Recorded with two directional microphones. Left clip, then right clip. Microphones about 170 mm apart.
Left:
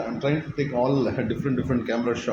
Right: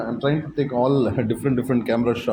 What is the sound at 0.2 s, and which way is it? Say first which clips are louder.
Speech: right 3 dB; 30° right (ahead or behind).